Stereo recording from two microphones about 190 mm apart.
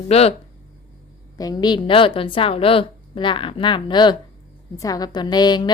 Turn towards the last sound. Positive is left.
turn(degrees=20)  # may be behind; listen again after turning